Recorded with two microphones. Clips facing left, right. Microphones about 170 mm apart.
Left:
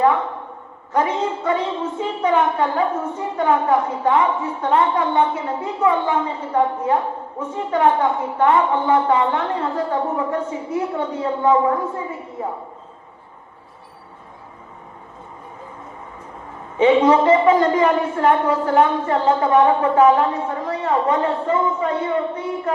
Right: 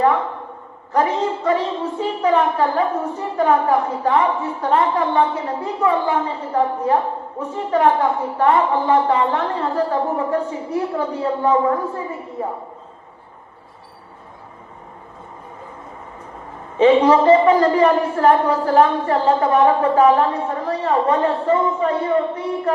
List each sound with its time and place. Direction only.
0.9 s a woman's voice: 35° right (ahead or behind)
16.7 s a woman's voice: 35° right (ahead or behind)